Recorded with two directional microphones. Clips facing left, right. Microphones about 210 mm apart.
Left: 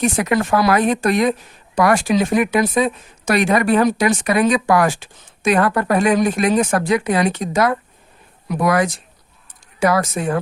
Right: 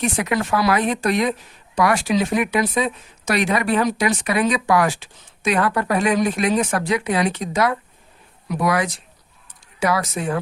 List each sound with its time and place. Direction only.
0.0 s a woman's voice: 45° left (ahead or behind)